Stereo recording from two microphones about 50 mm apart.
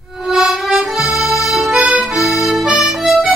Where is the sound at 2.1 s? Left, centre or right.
Centre.